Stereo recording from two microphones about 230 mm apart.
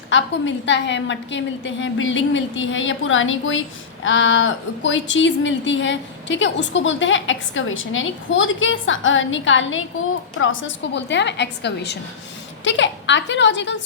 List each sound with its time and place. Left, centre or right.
0.1 s a woman's voice: left